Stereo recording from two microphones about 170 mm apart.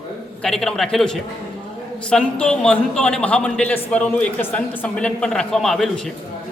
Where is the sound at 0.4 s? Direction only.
5° left (ahead or behind).